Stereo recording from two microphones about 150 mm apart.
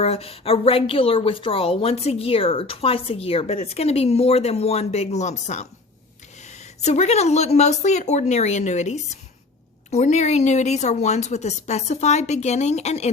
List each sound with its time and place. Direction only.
0.0 s a woman's voice: 40° left (ahead or behind)